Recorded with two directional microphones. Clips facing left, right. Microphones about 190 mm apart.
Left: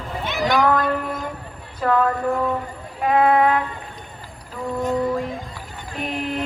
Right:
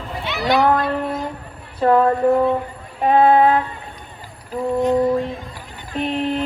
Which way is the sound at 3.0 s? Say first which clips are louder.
Right 3 dB; 30° right (ahead or behind).